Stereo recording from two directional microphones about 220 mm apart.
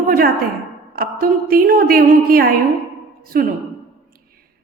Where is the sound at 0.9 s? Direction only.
40° right (ahead or behind).